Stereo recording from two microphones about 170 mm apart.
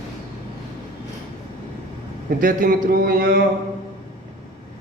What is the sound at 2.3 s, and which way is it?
A man's voice, 55° right (ahead or behind).